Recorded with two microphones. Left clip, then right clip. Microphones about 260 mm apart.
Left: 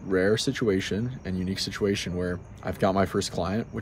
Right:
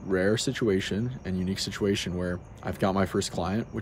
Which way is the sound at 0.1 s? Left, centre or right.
Centre.